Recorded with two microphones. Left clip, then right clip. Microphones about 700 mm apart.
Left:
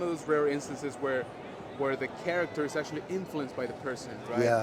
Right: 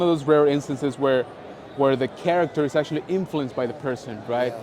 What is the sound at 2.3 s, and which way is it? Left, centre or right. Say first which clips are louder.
Speech: right 10 dB; right.